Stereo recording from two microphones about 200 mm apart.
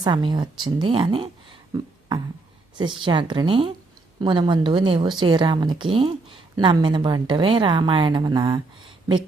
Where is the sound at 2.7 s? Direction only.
25° right (ahead or behind).